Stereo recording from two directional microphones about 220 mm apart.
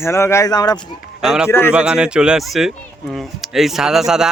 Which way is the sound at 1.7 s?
5° right (ahead or behind).